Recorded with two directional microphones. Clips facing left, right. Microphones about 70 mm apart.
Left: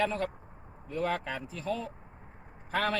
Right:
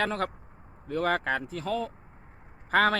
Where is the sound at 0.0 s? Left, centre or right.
Right.